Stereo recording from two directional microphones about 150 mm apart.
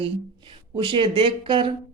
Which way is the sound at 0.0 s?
35° right (ahead or behind).